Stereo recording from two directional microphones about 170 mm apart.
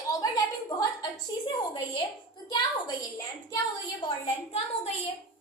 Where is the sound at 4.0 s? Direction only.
30° left (ahead or behind).